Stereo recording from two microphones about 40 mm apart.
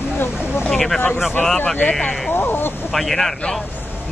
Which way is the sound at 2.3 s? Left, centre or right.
Left.